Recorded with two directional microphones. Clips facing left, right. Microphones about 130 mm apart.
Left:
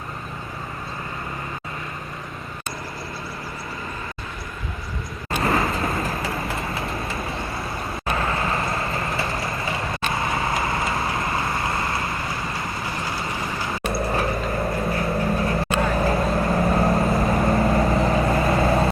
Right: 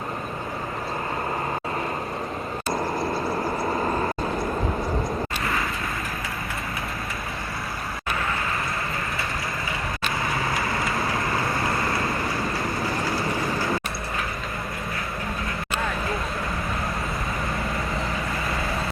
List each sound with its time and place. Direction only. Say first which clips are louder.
5.4 s vehicle: left 6 dB; 25° left (ahead or behind)
8.1 s vehicle: left 4 dB; 35° left (ahead or behind)
10.2 s vehicle: left 2 dB; 25° left (ahead or behind)
13.9 s vehicle: left 7 dB; 30° left (ahead or behind)
16.1 s vehicle: left 8 dB; 55° left (ahead or behind)
18.0 s vehicle: left 9 dB; 25° left (ahead or behind)